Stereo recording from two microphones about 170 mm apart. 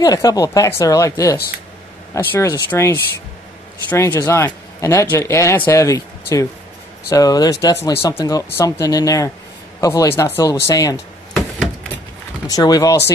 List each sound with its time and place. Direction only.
0.0 s a man's voice: 20° left (ahead or behind)
12.4 s speech: 20° left (ahead or behind)